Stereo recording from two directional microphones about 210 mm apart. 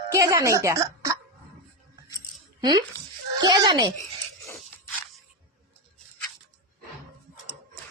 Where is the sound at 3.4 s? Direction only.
20° right (ahead or behind).